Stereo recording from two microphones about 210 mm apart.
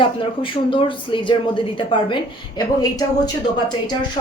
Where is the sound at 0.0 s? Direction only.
25° left (ahead or behind).